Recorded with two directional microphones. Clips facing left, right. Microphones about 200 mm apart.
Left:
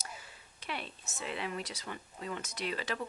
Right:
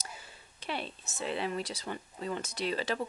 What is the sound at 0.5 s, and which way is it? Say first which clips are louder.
Speech: right 4 dB; 30° right (ahead or behind).